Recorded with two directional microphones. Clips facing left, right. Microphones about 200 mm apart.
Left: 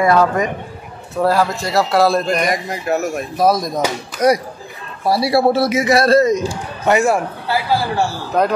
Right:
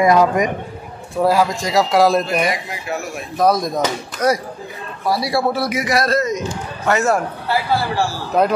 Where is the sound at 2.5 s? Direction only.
45° left (ahead or behind).